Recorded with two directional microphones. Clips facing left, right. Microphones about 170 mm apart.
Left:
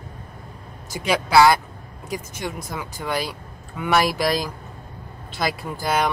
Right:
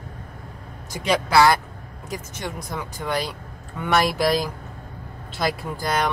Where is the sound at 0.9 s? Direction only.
5° left (ahead or behind).